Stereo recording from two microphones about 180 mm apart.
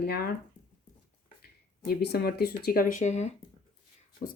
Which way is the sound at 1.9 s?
60° left (ahead or behind).